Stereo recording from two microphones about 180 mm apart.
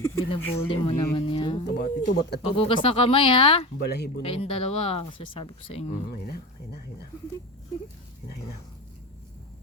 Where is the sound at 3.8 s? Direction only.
65° left (ahead or behind).